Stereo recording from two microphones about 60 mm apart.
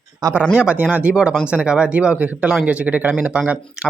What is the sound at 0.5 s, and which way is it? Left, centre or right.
Speech, centre.